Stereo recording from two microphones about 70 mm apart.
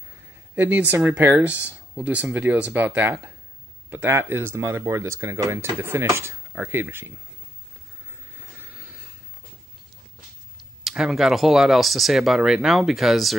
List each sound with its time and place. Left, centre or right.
0.6 s speech: right
3.0 s speech: right
6.5 s speech: right
8.5 s a sound: right
10.8 s speech: centre